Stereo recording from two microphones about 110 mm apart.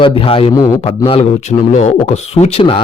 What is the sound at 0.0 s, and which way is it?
A man's voice, 50° left (ahead or behind).